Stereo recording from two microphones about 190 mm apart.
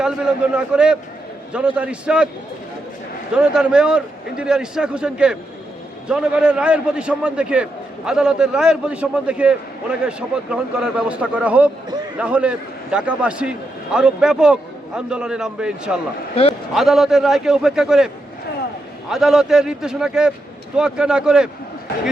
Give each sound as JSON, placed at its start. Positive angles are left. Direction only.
{"t": 0.0, "sound": "a man's voice", "side_deg": -5}
{"t": 3.3, "sound": "a man's voice", "side_deg": -5}
{"t": 16.3, "sound": "a man's voice", "side_deg": 30}
{"t": 16.7, "sound": "a man's voice", "side_deg": 0}